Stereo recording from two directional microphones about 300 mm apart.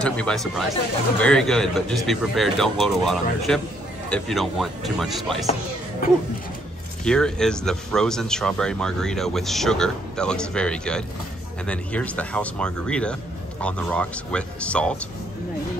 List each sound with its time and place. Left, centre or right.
0.0 s speech: centre
7.1 s speech: centre